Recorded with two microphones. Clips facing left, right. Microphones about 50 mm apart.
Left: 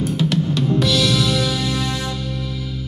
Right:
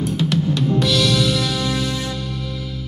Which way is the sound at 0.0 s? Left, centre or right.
Centre.